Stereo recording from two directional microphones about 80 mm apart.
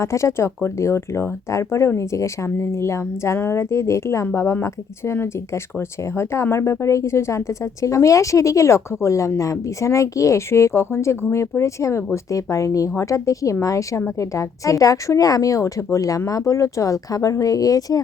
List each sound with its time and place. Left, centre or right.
0.0 s speech: left